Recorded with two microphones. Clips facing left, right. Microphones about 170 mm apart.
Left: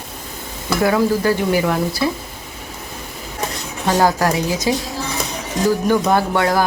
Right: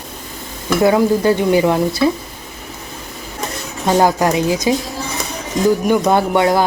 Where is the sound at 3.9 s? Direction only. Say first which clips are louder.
Right 2 dB; 15° right (ahead or behind).